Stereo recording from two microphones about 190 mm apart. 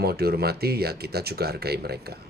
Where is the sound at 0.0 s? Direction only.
55° right (ahead or behind).